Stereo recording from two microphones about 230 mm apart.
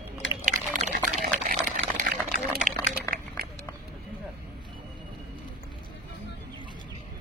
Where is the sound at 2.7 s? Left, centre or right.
Right.